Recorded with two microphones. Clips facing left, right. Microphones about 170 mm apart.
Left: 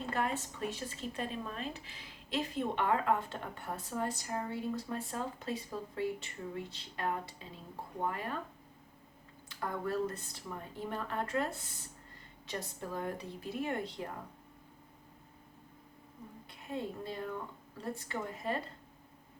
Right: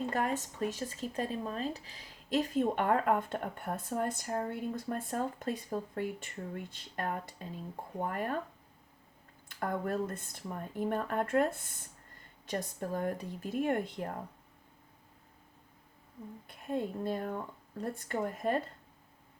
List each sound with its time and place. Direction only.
0.1 s speech: 45° right (ahead or behind)
9.5 s speech: 50° right (ahead or behind)
16.5 s speech: 50° right (ahead or behind)